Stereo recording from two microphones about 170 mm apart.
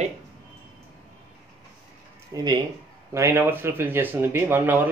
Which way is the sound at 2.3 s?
20° right (ahead or behind).